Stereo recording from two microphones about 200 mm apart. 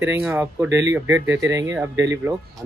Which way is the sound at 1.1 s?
65° right (ahead or behind).